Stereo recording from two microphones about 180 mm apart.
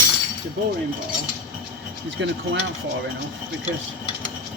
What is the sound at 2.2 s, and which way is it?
Speech, 90° right.